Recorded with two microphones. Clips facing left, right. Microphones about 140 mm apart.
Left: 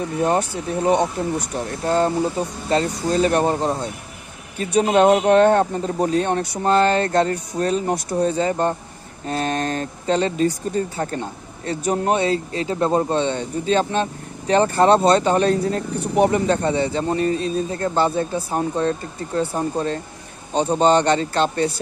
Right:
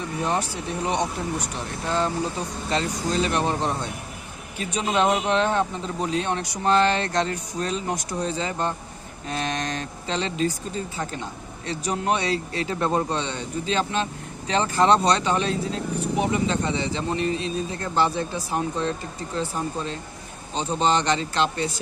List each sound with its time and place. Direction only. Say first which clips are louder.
0.5 s speech: left 7 dB; 50° left (ahead or behind)
4.7 s speech: left 8 dB; 45° left (ahead or behind)
11.9 s speech: left 5 dB; 40° left (ahead or behind)
13.1 s speech: left 7 dB; 50° left (ahead or behind)